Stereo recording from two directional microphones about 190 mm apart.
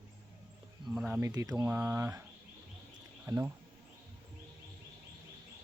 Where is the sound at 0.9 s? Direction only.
5° right (ahead or behind).